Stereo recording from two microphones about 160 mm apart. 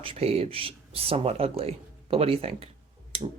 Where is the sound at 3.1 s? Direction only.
35° right (ahead or behind).